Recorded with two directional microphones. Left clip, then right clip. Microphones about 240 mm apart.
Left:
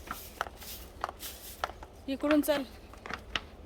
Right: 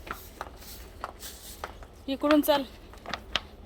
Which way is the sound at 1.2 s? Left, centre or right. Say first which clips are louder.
Right 1 dB; left.